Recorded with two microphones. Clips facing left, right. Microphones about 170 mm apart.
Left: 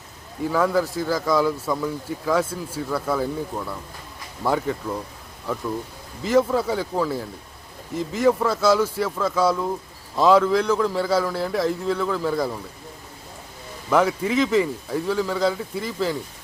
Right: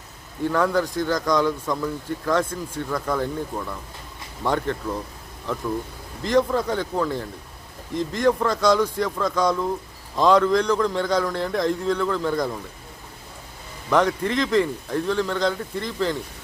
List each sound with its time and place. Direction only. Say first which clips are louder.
0.4 s speech: even; 5° left (ahead or behind)
13.9 s speech: left 1 dB; 5° left (ahead or behind)